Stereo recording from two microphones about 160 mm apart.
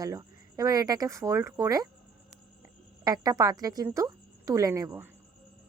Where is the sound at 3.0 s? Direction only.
25° right (ahead or behind).